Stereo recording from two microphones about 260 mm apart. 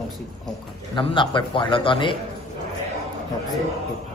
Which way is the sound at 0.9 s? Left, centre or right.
Centre.